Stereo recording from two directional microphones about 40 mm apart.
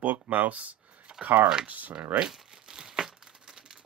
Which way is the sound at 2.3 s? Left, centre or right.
Centre.